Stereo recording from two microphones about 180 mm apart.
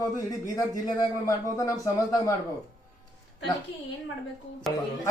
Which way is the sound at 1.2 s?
20° left (ahead or behind).